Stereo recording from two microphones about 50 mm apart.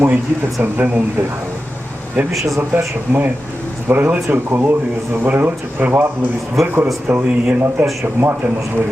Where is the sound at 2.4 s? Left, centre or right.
Right.